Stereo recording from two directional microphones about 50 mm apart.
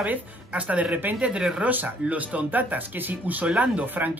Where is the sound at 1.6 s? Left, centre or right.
Right.